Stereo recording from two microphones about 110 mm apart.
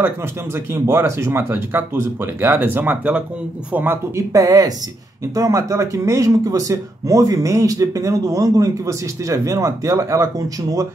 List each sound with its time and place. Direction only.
0.8 s speech: 25° right (ahead or behind)
4.3 s speech: 30° right (ahead or behind)